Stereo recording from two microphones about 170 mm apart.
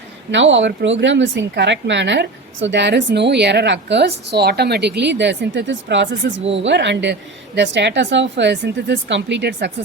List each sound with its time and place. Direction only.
0.3 s speech: 90° right